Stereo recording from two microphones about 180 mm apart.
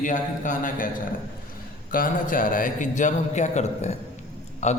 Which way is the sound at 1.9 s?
50° left (ahead or behind).